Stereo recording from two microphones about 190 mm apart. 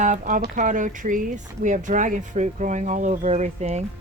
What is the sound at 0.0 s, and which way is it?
Speech, 40° right (ahead or behind).